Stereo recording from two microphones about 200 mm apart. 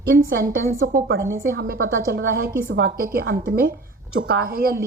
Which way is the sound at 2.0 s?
45° right (ahead or behind).